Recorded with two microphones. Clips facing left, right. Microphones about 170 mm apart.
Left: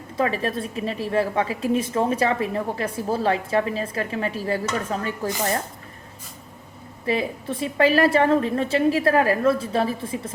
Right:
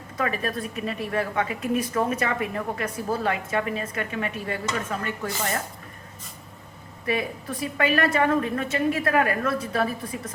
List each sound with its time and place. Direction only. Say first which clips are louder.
0.2 s a woman's voice: left 4 dB; 30° left (ahead or behind)
7.0 s a woman's voice: left 3 dB; 30° left (ahead or behind)